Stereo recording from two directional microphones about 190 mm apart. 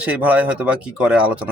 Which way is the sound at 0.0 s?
5° right (ahead or behind).